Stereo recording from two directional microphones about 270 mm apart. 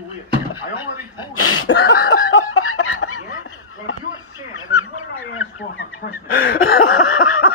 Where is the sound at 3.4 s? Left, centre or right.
Left.